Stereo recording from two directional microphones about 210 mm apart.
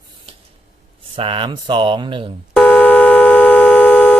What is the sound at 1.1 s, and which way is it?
Speech, 25° right (ahead or behind).